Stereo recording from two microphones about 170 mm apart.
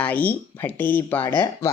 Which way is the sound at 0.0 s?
10° left (ahead or behind).